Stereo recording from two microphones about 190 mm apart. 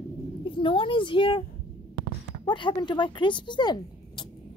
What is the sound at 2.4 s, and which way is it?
A woman's voice, 25° left (ahead or behind).